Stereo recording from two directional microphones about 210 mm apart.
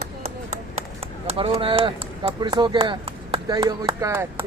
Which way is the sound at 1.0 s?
30° right (ahead or behind).